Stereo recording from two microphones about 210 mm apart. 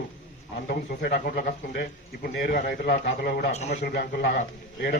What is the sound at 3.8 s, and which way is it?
Speech, 50° left (ahead or behind).